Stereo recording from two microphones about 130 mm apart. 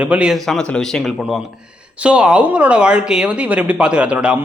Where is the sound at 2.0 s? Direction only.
10° right (ahead or behind).